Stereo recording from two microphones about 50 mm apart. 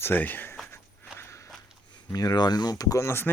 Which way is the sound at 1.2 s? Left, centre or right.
Left.